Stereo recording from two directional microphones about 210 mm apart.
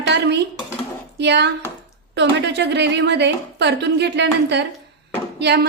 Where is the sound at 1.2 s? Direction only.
55° right (ahead or behind).